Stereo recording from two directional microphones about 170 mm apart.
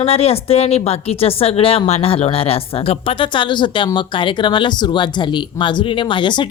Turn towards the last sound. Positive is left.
turn(degrees=30)  # may be behind; listen again after turning